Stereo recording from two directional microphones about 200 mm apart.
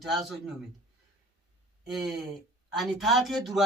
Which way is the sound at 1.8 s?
Centre (ahead or behind).